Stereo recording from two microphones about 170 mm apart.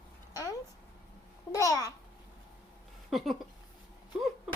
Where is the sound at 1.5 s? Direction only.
20° left (ahead or behind).